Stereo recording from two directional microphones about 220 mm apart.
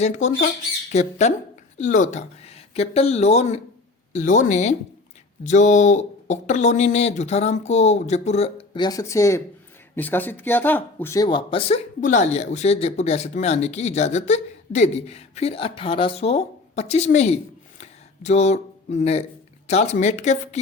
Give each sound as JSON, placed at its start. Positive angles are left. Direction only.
{"t": 0.0, "sound": "speech", "side_deg": 30}